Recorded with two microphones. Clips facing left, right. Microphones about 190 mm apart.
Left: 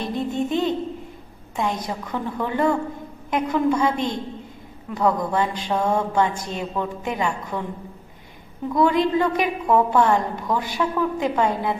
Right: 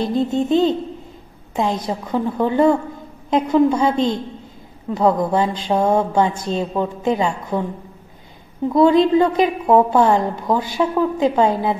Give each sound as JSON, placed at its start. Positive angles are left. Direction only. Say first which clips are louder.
{"t": 0.0, "sound": "music", "louder": "right 6 dB", "side_deg": -30}
{"t": 1.6, "sound": "a woman's voice", "louder": "right 5 dB", "side_deg": -30}
{"t": 8.6, "sound": "a woman's voice", "louder": "right 6 dB", "side_deg": -30}